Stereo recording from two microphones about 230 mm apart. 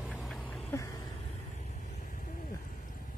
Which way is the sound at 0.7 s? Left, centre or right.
Centre.